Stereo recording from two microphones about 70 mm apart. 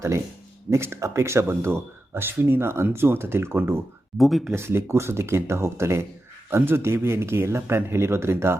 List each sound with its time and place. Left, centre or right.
0.7 s speech: right
4.2 s speech: centre
4.5 s speech: right